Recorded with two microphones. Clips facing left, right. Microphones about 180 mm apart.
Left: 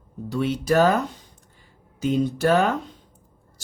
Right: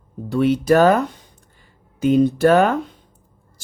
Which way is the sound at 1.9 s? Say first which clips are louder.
Right 7 dB; 60° right (ahead or behind).